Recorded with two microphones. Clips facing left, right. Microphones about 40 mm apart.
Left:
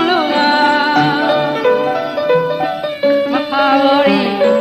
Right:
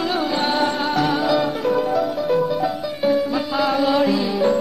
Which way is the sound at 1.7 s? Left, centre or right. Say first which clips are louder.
Left 5 dB; left.